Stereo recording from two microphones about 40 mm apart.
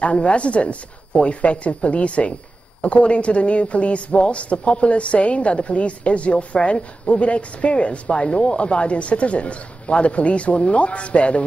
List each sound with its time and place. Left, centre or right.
0.0 s speech: left